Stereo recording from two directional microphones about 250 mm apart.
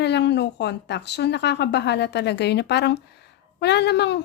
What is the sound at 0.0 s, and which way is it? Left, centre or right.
A woman's voice, left.